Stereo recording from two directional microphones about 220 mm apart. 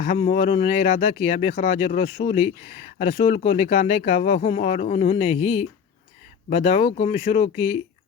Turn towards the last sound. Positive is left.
turn(degrees=25)  # may be behind; listen again after turning